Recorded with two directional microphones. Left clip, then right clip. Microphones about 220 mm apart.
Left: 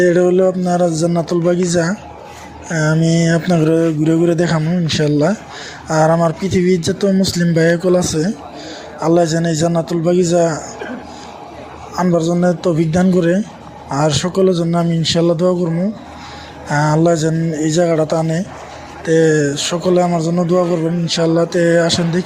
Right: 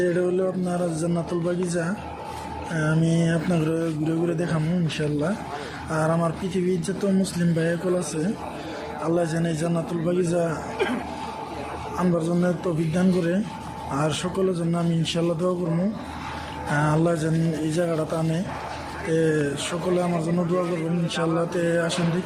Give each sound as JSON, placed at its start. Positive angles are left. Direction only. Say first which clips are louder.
{"t": 0.0, "sound": "speech", "louder": "left 11 dB", "side_deg": 30}
{"t": 11.9, "sound": "speech", "louder": "left 10 dB", "side_deg": 25}
{"t": 16.7, "sound": "speech", "louder": "left 9 dB", "side_deg": 25}
{"t": 21.1, "sound": "speech", "louder": "left 10 dB", "side_deg": 30}